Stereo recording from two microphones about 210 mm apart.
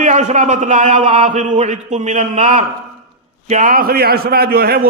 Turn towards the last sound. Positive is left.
turn(degrees=-45)  # may be behind; listen again after turning